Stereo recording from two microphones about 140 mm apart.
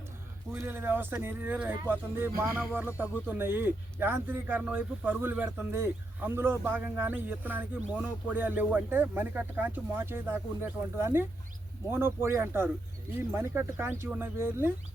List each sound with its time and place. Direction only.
0.5 s speech: 15° right (ahead or behind)